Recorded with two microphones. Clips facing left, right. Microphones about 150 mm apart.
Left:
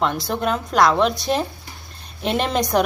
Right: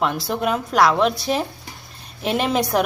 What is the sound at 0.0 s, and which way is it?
A woman's voice, 5° right (ahead or behind).